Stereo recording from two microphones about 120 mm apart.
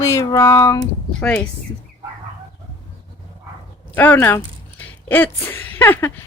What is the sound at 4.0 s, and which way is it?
Speech, 15° left (ahead or behind).